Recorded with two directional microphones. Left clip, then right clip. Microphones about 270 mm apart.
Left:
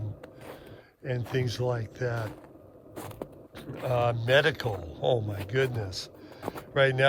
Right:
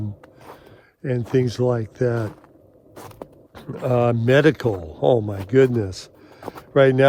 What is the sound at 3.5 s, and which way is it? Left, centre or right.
Speech, centre.